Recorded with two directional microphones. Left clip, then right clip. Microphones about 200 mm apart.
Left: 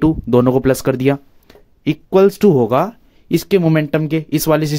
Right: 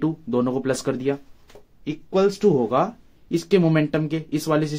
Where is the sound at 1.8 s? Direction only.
60° left (ahead or behind).